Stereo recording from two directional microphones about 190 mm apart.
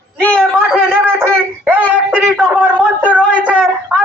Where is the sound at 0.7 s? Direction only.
10° right (ahead or behind).